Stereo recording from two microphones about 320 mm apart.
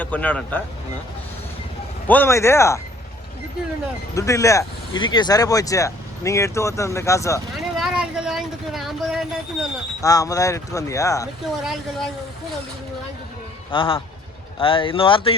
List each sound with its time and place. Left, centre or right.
0.0 s speech: centre
2.0 s speech: centre
4.1 s speech: centre
7.8 s speech: centre
10.0 s speech: centre
11.6 s speech: centre
13.7 s speech: centre